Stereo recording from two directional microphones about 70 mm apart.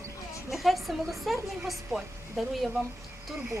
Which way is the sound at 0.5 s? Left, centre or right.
Centre.